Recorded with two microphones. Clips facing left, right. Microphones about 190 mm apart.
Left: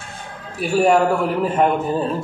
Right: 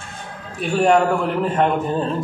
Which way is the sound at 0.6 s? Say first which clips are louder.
Left 1 dB; 5° left (ahead or behind).